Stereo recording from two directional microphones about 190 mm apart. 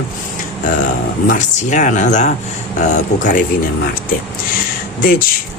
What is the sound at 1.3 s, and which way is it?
Speech, 40° left (ahead or behind).